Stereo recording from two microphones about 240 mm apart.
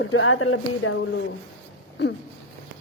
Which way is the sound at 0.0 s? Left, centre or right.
Left.